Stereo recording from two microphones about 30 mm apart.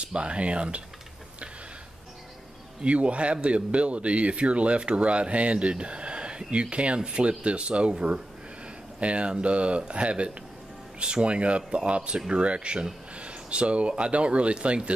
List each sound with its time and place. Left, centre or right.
0.0 s speech: right
2.8 s speech: right
9.0 s speech: right